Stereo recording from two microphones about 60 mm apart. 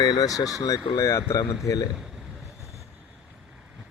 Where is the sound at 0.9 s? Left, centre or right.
Left.